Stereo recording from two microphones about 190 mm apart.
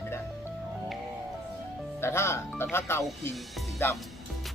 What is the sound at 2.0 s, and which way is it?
Speech, 15° left (ahead or behind).